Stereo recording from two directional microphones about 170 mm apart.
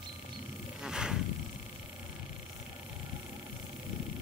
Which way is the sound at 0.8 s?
5° right (ahead or behind).